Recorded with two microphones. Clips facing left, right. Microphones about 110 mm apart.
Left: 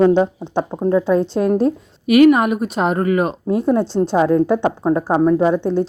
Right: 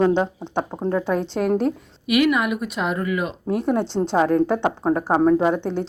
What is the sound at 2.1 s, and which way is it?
Speech, 40° left (ahead or behind).